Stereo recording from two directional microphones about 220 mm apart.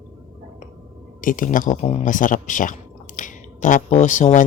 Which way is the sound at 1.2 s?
35° left (ahead or behind).